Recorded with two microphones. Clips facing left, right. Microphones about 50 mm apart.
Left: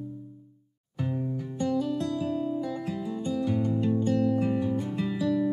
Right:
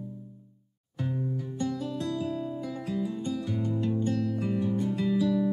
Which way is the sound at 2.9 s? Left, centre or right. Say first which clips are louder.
Even; centre.